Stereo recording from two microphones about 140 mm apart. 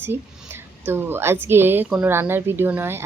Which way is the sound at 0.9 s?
15° right (ahead or behind).